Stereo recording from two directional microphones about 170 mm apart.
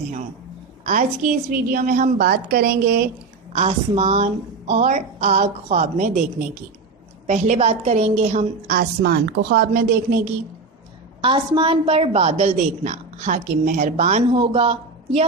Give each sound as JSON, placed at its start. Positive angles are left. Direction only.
{"t": 0.9, "sound": "a woman's voice", "side_deg": -50}
{"t": 3.5, "sound": "a woman's voice", "side_deg": -40}
{"t": 7.3, "sound": "a woman's voice", "side_deg": -45}
{"t": 8.2, "sound": "a woman's voice", "side_deg": -50}
{"t": 11.2, "sound": "a woman's voice", "side_deg": -30}
{"t": 14.3, "sound": "speech", "side_deg": -35}